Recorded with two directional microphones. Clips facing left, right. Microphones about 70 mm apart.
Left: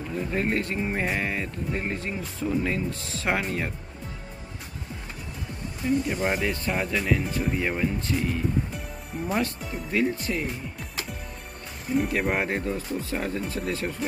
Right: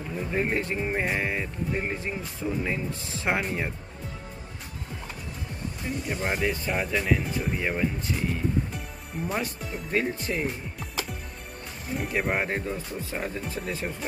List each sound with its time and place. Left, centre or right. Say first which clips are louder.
0.1 s speech: left 1 dB; centre
2.9 s speech: left 1 dB; right
3.3 s speech: left 1 dB; centre
6.0 s speech: left 2 dB; centre
9.9 s speech: left 2 dB; right
11.9 s speech: left 3 dB; centre
12.5 s speech: left 3 dB; right